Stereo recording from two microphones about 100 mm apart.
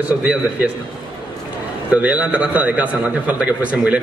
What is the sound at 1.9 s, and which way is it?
A man's voice, 15° right (ahead or behind).